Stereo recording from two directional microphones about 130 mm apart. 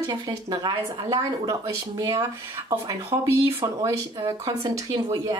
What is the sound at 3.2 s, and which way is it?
Speech, 20° right (ahead or behind).